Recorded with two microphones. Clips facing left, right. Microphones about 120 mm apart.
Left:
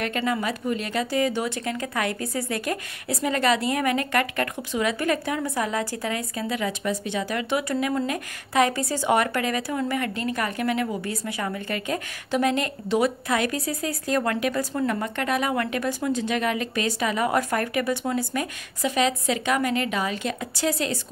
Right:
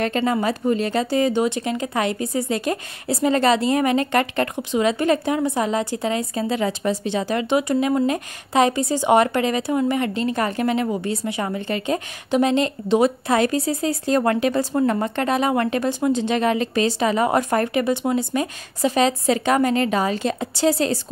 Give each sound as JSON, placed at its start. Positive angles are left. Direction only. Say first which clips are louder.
{"t": 0.0, "sound": "speech", "louder": "right 5 dB", "side_deg": -30}